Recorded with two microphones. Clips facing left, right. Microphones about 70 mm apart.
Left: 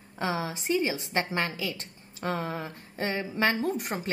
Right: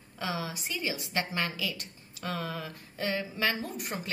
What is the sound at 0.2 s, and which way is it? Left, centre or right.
A woman's voice, left.